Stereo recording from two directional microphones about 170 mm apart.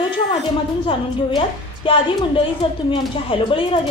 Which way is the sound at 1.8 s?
30° left (ahead or behind).